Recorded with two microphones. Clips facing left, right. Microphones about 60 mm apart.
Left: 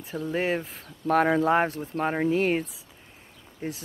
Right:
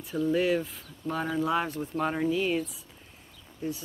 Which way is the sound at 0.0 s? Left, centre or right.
Left.